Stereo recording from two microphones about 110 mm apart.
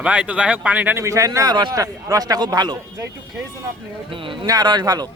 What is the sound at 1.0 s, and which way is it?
A man's voice, 30° right (ahead or behind).